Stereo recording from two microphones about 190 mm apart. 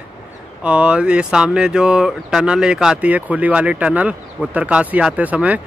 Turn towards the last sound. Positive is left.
turn(degrees=-5)  # may be behind; listen again after turning